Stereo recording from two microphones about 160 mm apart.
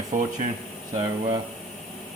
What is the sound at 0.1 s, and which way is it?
Speech, 55° right (ahead or behind).